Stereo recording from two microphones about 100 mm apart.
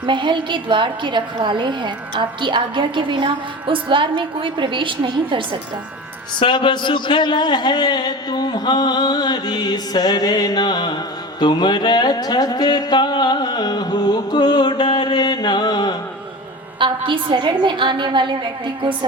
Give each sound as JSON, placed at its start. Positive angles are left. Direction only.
{"t": 0.0, "sound": "a woman's voice", "side_deg": -55}
{"t": 6.4, "sound": "a man's voice", "side_deg": 55}
{"t": 14.9, "sound": "mantra", "side_deg": 45}
{"t": 16.8, "sound": "a woman's voice", "side_deg": -55}